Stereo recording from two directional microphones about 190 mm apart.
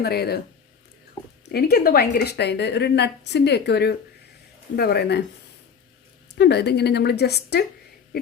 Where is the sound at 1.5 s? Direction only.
55° left (ahead or behind).